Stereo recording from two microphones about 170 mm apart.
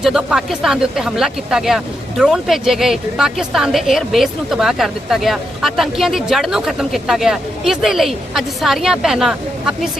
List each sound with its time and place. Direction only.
0.0 s speech: 5° right (ahead or behind)